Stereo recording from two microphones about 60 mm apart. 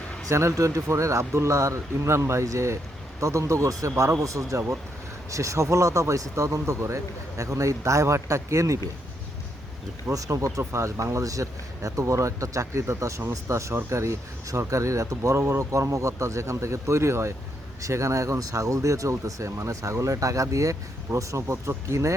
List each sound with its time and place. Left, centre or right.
0.3 s speech: right
10.1 s speech: right
10.6 s speech: right
21.4 s speech: right